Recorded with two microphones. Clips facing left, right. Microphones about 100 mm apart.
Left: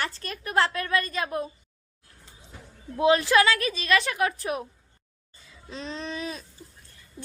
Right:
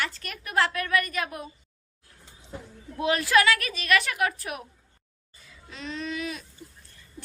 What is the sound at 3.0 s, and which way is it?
A woman's voice, 20° left (ahead or behind).